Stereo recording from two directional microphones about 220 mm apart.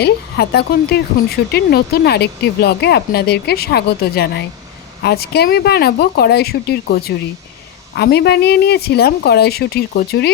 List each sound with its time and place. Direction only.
0.0 s speech: 45° left (ahead or behind)